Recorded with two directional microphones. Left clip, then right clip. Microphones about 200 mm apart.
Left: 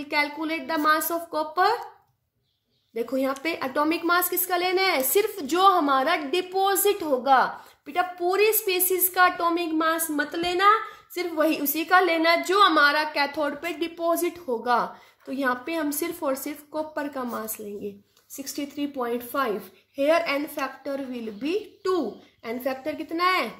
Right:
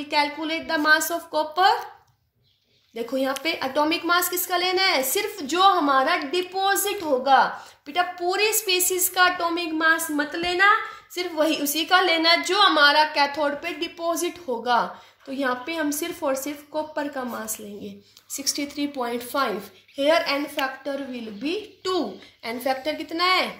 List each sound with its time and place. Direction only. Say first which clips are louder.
0.1 s a woman's voice: right 2 dB; 45° left (ahead or behind)
2.9 s a woman's voice: right 1 dB; 45° left (ahead or behind)